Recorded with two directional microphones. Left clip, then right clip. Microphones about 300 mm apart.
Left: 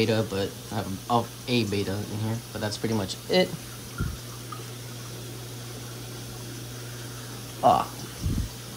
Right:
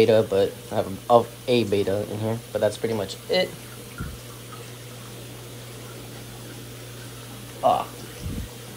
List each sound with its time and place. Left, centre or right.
0.0 s speech: centre
7.6 s speech: left